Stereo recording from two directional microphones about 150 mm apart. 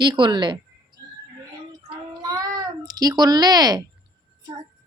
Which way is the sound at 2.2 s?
25° right (ahead or behind).